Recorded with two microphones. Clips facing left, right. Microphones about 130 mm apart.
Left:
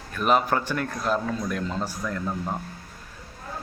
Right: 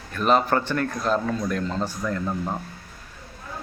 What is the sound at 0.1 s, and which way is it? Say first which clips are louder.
A man's voice: right 2 dB; 10° left (ahead or behind).